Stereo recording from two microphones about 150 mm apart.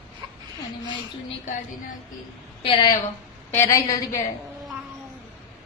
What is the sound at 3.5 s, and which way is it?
Speech, 20° left (ahead or behind).